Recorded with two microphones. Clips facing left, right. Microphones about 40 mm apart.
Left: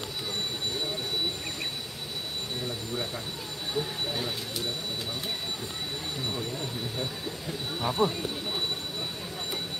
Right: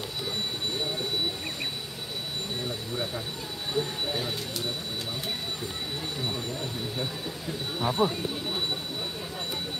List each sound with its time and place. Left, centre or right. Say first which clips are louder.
3.7 s speech: right 2 dB; centre
6.1 s speech: even; centre